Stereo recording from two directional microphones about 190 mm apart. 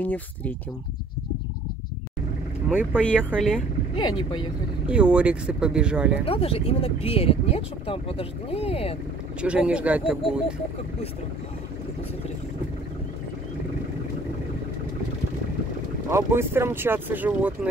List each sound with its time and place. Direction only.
0.0 s speech: 10° left (ahead or behind)
2.7 s speech: 5° right (ahead or behind)
3.9 s speech: 25° left (ahead or behind)
4.8 s speech: 5° right (ahead or behind)
6.2 s speech: 30° left (ahead or behind)
9.4 s speech: 5° right (ahead or behind)
16.1 s speech: 15° right (ahead or behind)